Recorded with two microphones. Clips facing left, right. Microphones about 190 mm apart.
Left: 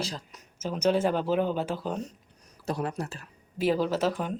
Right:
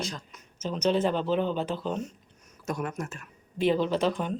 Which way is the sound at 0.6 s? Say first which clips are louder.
Even; 10° left (ahead or behind).